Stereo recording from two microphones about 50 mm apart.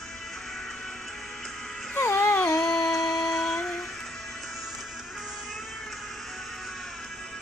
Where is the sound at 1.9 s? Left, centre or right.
Left.